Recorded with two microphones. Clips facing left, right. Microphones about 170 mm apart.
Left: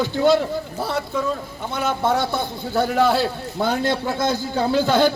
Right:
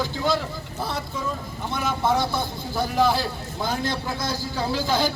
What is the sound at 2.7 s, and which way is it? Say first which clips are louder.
A man's voice: left 4 dB; 60° left (ahead or behind).